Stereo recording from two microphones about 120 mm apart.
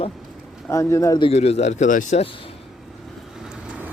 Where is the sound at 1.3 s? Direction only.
60° left (ahead or behind); by 2.2 s 85° left.